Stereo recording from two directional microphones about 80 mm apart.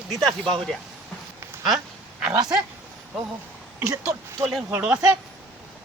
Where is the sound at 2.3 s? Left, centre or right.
Right.